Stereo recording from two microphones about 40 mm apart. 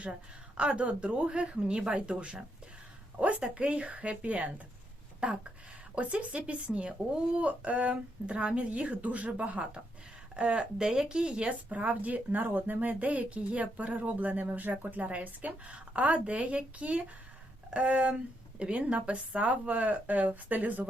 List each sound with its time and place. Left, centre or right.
0.0 s speech: right
11.7 s speech: right